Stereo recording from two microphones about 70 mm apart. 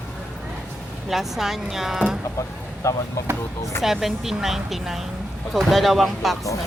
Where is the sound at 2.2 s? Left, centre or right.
Left.